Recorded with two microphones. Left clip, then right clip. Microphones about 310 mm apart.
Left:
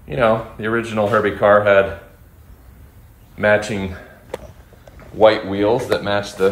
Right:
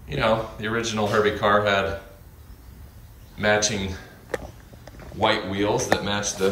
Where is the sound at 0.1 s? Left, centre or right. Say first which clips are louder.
Left 6 dB; centre.